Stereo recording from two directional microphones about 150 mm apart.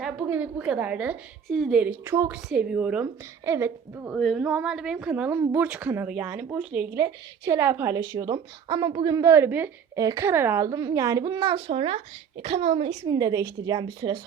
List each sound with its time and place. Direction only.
0.0 s a woman's voice: 10° right (ahead or behind)
4.1 s a woman's voice: centre (ahead or behind); by 13.1 s 45° right (ahead or behind)
13.1 s a woman's voice: 25° right (ahead or behind)